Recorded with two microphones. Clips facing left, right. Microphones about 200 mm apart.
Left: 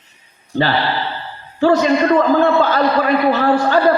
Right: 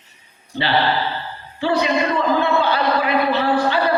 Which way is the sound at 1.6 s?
45° left (ahead or behind).